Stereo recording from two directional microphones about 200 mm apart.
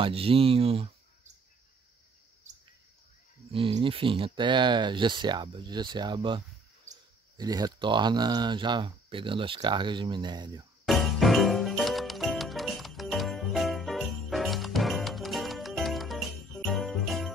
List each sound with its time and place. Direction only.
0.0 s speech: 30° right (ahead or behind)
3.5 s speech: 25° right (ahead or behind)
10.9 s music: centre (ahead or behind)